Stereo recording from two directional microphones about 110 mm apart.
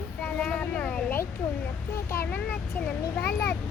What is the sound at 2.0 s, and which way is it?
Speech, 20° left (ahead or behind).